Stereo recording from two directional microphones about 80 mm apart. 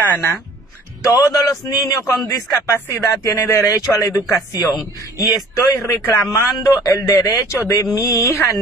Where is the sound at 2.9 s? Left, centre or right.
Left.